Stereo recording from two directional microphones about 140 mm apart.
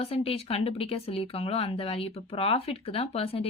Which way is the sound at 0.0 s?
45° left (ahead or behind).